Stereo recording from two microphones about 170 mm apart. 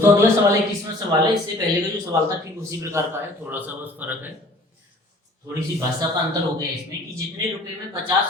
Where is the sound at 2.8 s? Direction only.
15° right (ahead or behind).